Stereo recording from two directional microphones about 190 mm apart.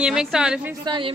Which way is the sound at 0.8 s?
25° right (ahead or behind).